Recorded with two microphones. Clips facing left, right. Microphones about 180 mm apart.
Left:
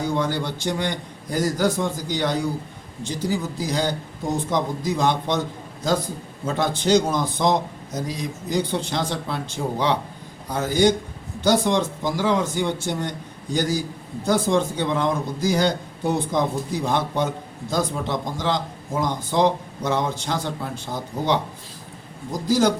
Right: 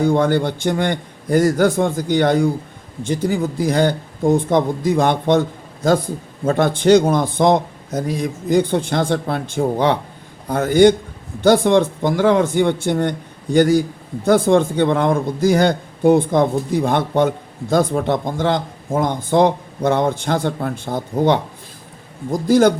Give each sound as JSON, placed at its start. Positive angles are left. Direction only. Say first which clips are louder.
{"t": 0.0, "sound": "a man's voice", "louder": "right 8 dB", "side_deg": -50}
{"t": 6.4, "sound": "a man's voice", "louder": "right 7 dB", "side_deg": -55}